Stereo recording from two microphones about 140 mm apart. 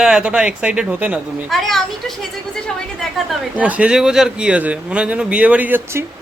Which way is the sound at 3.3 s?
10° right (ahead or behind).